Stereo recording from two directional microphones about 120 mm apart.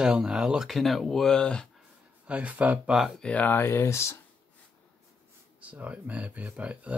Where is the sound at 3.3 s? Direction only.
15° left (ahead or behind).